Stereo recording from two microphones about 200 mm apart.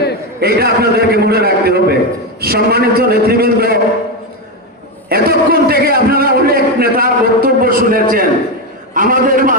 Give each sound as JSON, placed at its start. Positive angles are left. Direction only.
{"t": 0.3, "sound": "a man's voice", "side_deg": -55}
{"t": 5.0, "sound": "a man's voice", "side_deg": -50}